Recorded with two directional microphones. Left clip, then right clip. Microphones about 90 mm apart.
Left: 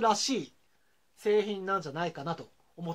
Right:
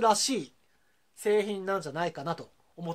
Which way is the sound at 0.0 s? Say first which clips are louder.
Right 2 dB; 30° right (ahead or behind).